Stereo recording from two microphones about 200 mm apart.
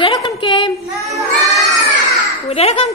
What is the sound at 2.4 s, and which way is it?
Speech, 30° left (ahead or behind).